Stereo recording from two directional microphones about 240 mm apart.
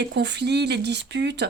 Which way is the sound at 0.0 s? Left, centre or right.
Right.